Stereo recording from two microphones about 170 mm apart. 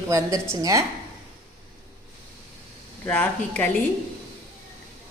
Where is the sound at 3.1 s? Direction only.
10° left (ahead or behind).